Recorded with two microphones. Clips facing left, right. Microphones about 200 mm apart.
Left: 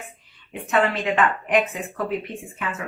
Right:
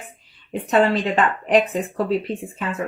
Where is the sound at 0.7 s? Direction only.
35° right (ahead or behind).